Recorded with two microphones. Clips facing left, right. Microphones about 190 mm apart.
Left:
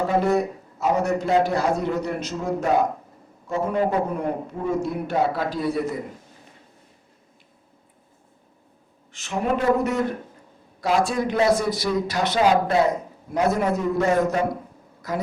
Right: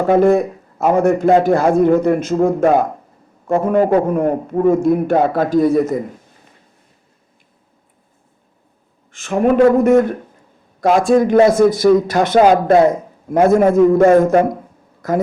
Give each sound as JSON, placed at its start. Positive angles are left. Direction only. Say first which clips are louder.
{"t": 0.1, "sound": "a man's voice", "louder": "right 9 dB", "side_deg": -50}
{"t": 9.1, "sound": "a man's voice", "louder": "right 11 dB", "side_deg": -50}